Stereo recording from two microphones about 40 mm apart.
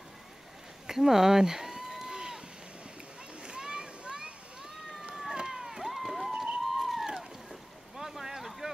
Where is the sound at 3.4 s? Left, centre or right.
Right.